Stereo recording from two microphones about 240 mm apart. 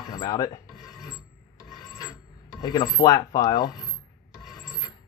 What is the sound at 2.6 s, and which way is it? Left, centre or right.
Speech, centre.